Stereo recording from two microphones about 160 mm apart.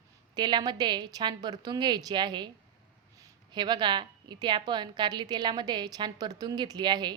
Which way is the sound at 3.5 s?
30° right (ahead or behind).